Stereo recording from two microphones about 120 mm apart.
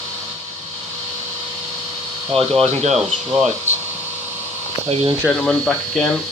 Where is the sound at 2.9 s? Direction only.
5° right (ahead or behind).